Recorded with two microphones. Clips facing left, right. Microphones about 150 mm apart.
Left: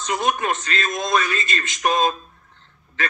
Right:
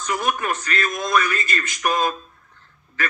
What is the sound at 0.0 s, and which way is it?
A man's voice, 20° left (ahead or behind).